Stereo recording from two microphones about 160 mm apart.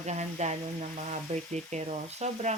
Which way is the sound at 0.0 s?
45° right (ahead or behind).